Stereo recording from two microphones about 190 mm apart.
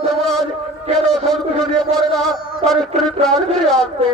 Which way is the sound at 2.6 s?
35° right (ahead or behind).